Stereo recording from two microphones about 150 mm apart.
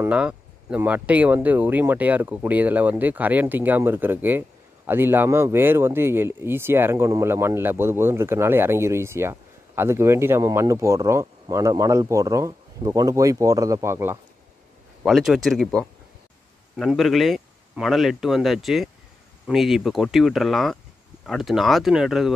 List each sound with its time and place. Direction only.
0.0 s speech: 10° right (ahead or behind)
15.0 s speech: centre (ahead or behind)